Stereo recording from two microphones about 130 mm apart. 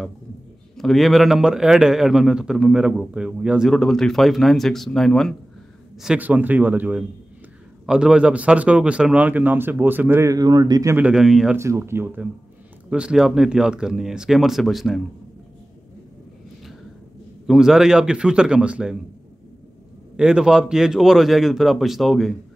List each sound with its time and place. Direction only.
0.7 s a man's voice: centre (ahead or behind)
5.9 s speech: 10° right (ahead or behind)
10.3 s speech: 30° right (ahead or behind)
11.0 s a man's voice: 5° right (ahead or behind)
11.5 s speech: 20° right (ahead or behind)
12.9 s a man's voice: 5° right (ahead or behind)
17.5 s speech: 5° right (ahead or behind)
20.2 s a man's voice: 5° right (ahead or behind)